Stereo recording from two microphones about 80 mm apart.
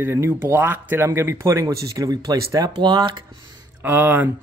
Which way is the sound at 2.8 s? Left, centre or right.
Right.